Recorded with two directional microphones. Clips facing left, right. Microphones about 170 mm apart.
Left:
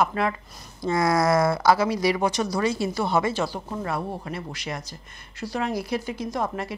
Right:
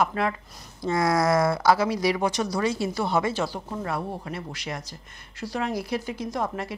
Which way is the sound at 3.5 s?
30° left (ahead or behind).